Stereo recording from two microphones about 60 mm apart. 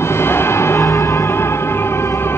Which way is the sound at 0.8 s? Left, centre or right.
Left.